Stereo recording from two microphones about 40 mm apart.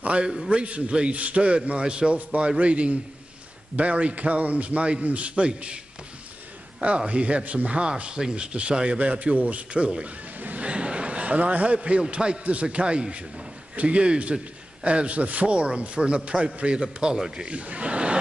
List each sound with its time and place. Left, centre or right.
0.0 s a man's voice: right
7.1 s speech: right
10.4 s a sound: right
10.7 s a man's voice: right
17.5 s speech: right